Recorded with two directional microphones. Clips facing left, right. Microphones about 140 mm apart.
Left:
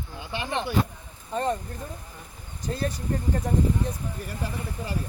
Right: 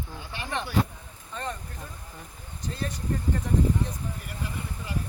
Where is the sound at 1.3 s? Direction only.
40° left (ahead or behind).